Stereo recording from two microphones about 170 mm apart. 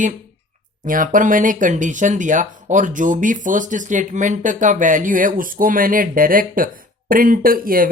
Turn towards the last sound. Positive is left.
turn(degrees=-55)  # may be behind; listen again after turning